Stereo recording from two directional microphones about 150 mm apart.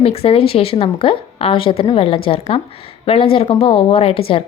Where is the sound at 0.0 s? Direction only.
40° left (ahead or behind).